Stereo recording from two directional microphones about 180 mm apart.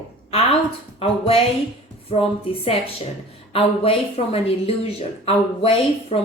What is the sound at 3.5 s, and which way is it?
Speech, 35° left (ahead or behind).